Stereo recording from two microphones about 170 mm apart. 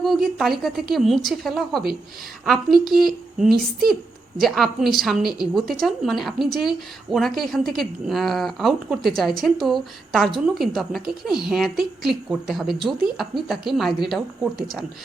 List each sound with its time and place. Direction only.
0.0 s speech: centre (ahead or behind)